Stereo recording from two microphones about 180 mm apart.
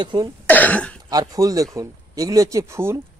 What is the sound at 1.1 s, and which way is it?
Speech, 20° right (ahead or behind).